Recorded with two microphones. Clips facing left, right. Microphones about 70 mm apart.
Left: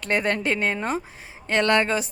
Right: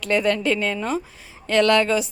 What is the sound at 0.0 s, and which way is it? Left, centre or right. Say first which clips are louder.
Speech: right 3 dB; left.